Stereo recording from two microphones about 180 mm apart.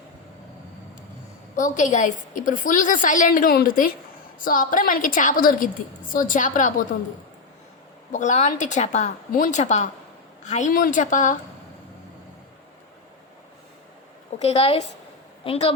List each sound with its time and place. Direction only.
1.5 s a woman's voice: 45° left (ahead or behind)
8.1 s a woman's voice: 40° left (ahead or behind)
14.3 s a woman's voice: 35° left (ahead or behind)